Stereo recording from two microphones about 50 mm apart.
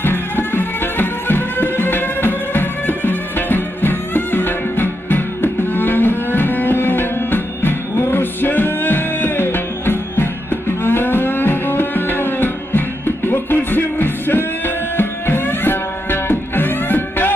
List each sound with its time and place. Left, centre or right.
0.0 s music: left